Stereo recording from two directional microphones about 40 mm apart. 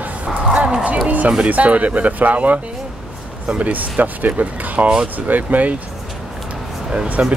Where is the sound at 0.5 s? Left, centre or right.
Right.